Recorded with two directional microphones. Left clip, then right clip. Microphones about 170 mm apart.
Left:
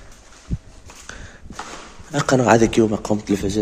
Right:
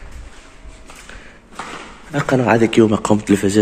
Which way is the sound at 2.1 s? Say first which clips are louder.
Even; 25° left (ahead or behind).